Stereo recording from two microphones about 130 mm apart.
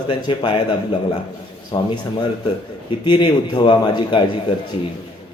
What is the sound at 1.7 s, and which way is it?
Speech, 35° left (ahead or behind).